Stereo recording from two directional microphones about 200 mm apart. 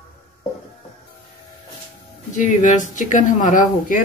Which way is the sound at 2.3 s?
40° left (ahead or behind).